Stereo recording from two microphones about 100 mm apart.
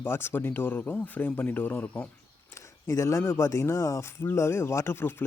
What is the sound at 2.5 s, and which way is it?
Speech, 30° left (ahead or behind).